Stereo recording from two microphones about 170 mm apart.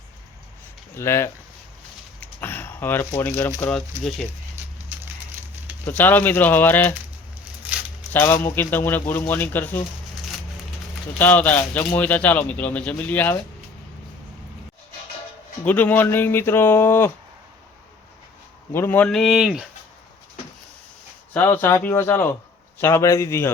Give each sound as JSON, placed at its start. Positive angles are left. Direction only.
{"t": 0.9, "sound": "a man's voice", "side_deg": 15}
{"t": 2.2, "sound": "a sound", "side_deg": 10}
{"t": 3.2, "sound": "a man's voice", "side_deg": 10}
{"t": 4.9, "sound": "a sound", "side_deg": -10}
{"t": 5.8, "sound": "a man's voice", "side_deg": 10}
{"t": 7.7, "sound": "a sound", "side_deg": -10}
{"t": 8.1, "sound": "a man's voice", "side_deg": 15}
{"t": 11.2, "sound": "a man's voice", "side_deg": 10}
{"t": 15.6, "sound": "a man's voice", "side_deg": 10}
{"t": 18.7, "sound": "a man's voice", "side_deg": 15}
{"t": 19.0, "sound": "speech", "side_deg": 0}
{"t": 21.3, "sound": "a man's voice", "side_deg": 10}